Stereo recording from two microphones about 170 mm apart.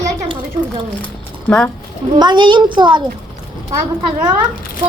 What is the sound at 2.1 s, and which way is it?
Speech, 25° right (ahead or behind).